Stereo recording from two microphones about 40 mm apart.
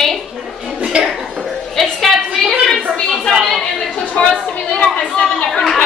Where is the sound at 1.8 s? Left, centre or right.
Centre.